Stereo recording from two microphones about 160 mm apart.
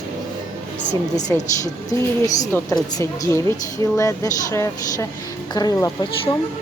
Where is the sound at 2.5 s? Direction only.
15° left (ahead or behind).